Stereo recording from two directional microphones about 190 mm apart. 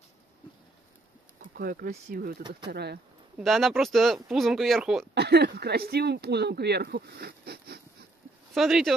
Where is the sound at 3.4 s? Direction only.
Centre (ahead or behind).